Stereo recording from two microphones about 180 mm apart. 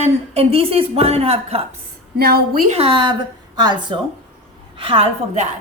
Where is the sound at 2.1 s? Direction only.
60° right (ahead or behind).